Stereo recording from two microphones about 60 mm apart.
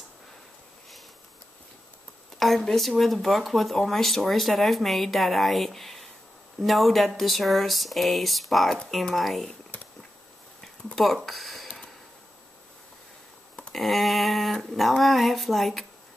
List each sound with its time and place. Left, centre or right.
2.3 s speech: centre
9.7 s a sound: left
11.0 s speech: centre
13.7 s speech: centre